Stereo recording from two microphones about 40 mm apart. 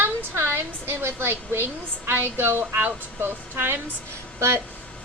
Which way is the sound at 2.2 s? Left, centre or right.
Right.